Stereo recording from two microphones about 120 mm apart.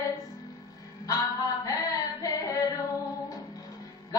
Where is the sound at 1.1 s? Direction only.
30° left (ahead or behind).